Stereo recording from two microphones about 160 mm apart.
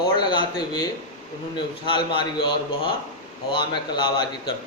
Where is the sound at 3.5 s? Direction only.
30° left (ahead or behind).